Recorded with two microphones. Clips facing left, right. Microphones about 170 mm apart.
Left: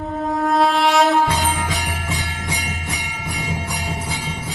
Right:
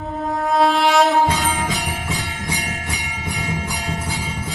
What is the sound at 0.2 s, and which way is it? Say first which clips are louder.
Music: even; centre (ahead or behind).